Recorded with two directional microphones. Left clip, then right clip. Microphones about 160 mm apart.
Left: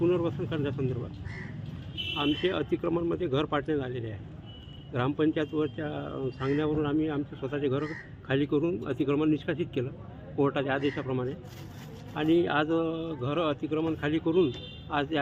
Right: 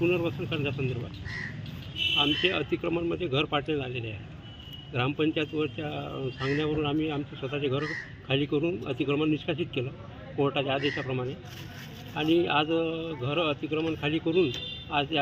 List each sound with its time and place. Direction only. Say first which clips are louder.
0.0 s speech: even; 15° left (ahead or behind)
2.1 s speech: right 2 dB; 15° left (ahead or behind)